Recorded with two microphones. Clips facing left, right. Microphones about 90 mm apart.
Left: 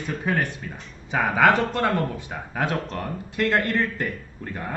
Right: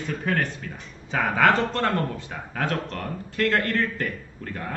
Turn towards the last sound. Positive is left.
turn(degrees=15)  # may be behind; listen again after turning